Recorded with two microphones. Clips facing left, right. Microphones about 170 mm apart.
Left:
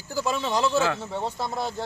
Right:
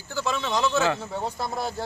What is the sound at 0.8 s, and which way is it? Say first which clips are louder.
Speech: right 1 dB; centre (ahead or behind).